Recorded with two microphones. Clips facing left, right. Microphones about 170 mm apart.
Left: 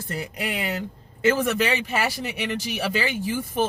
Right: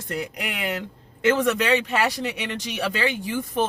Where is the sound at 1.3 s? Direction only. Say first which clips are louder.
Right 2 dB; 5° left (ahead or behind).